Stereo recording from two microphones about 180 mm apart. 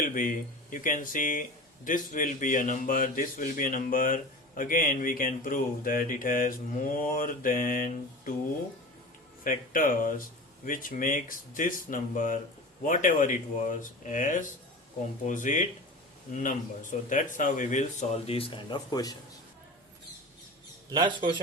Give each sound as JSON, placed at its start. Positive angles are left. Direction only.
{"t": 0.0, "sound": "speech", "side_deg": 50}
{"t": 9.4, "sound": "speech", "side_deg": 50}
{"t": 20.9, "sound": "speech", "side_deg": -25}